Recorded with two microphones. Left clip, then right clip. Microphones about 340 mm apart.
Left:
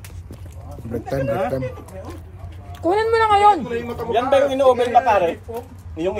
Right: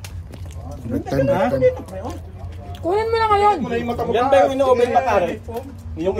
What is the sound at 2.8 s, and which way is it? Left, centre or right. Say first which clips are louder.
A man's voice: left 1 dB; left.